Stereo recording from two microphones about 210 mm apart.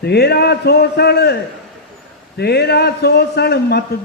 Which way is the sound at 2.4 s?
50° left (ahead or behind).